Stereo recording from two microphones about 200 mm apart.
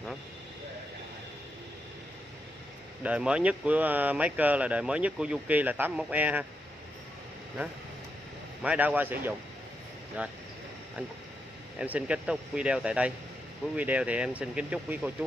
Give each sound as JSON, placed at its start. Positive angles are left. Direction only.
{"t": 3.0, "sound": "speech", "side_deg": -5}
{"t": 8.6, "sound": "speech", "side_deg": -10}
{"t": 11.8, "sound": "speech", "side_deg": -5}